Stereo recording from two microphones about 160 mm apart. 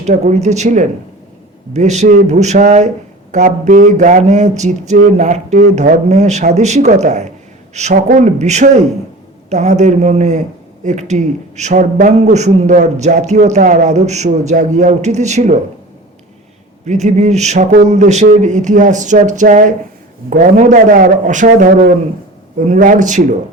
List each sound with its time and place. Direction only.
0.0 s a man's voice: 50° right (ahead or behind)
16.8 s a man's voice: 45° right (ahead or behind)